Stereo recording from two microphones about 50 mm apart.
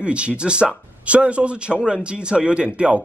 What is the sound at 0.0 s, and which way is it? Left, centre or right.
Speech, right.